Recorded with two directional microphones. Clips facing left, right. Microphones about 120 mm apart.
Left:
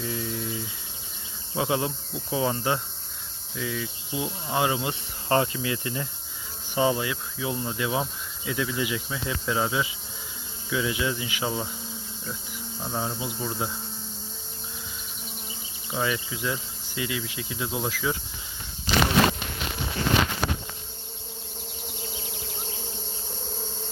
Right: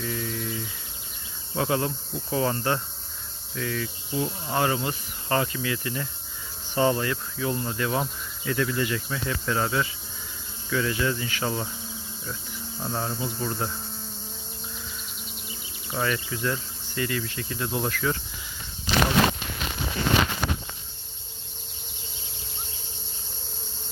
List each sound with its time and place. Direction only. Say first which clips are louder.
0.0 s a sound: even; 20° left (ahead or behind)
1.5 s insect: right 1 dB; 15° left (ahead or behind)
5.3 s cricket: left 2 dB; 25° left (ahead or behind)
6.7 s insect: right 1 dB; 10° left (ahead or behind)
12.8 s insect: right 1 dB; 5° left (ahead or behind)
15.9 s insect: even; 10° left (ahead or behind)